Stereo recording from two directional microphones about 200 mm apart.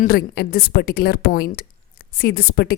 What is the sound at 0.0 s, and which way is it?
Speech, 50° left (ahead or behind).